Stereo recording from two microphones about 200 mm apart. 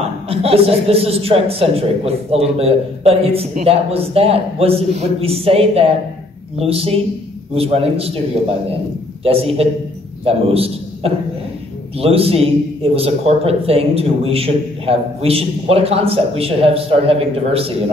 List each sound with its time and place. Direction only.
0.3 s a woman's voice: 30° right (ahead or behind)
9.2 s a woman's voice: 30° right (ahead or behind)